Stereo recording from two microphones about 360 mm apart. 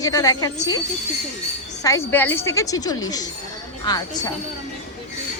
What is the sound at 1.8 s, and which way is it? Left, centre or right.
A woman's voice, centre.